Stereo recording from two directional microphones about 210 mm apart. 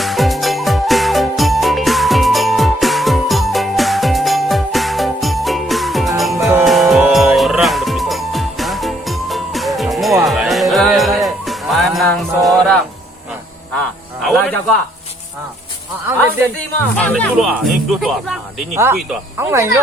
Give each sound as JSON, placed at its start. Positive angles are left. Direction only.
{"t": 0.0, "sound": "music", "side_deg": 0}
{"t": 13.7, "sound": "a sound", "side_deg": 0}
{"t": 16.7, "sound": "speech", "side_deg": 5}
{"t": 19.4, "sound": "speech", "side_deg": -10}